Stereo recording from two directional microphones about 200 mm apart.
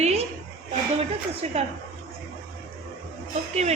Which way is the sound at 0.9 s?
30° right (ahead or behind).